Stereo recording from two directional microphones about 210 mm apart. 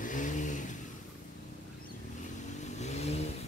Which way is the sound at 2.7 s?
30° left (ahead or behind).